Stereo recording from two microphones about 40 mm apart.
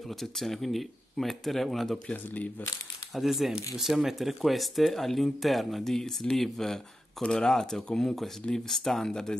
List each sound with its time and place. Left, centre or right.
0.2 s speech: centre
3.2 s speech: centre